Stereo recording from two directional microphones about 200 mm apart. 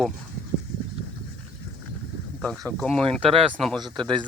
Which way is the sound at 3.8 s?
25° right (ahead or behind).